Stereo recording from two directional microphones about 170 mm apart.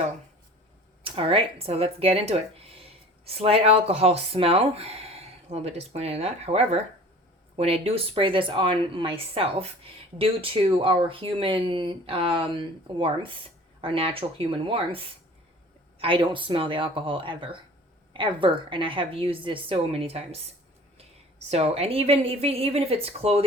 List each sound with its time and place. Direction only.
1.0 s speech: 35° right (ahead or behind)
21.5 s speech: 35° right (ahead or behind)